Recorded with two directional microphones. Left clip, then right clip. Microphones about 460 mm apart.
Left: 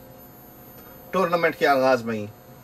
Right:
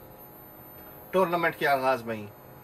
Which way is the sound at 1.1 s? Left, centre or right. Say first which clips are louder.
Left 3 dB; centre.